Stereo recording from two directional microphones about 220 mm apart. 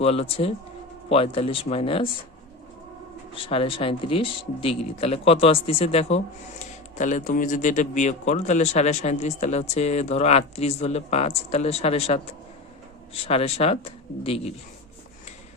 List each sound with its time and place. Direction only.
0.0 s speech: 30° left (ahead or behind)
3.3 s speech: 25° left (ahead or behind)